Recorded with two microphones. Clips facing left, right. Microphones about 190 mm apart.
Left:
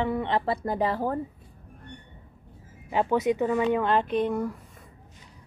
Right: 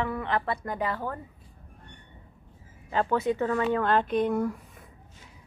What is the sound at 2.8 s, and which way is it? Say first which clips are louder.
Speech: left 2 dB; 15° left (ahead or behind).